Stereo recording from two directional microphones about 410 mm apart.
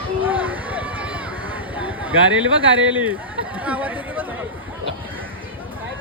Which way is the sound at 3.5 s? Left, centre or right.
Centre.